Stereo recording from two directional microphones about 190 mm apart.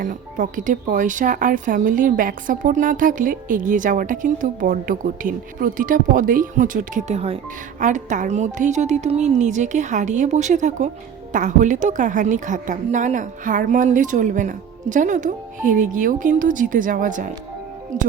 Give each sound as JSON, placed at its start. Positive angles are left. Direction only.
{"t": 0.0, "sound": "a woman's voice", "side_deg": -45}